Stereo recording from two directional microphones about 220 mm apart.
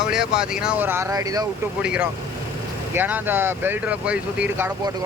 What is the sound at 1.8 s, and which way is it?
Speech, 5° right (ahead or behind).